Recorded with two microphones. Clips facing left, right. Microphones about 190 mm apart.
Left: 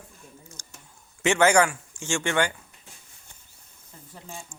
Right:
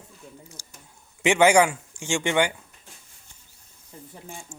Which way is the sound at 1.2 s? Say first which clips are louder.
Right 2 dB; 15° right (ahead or behind).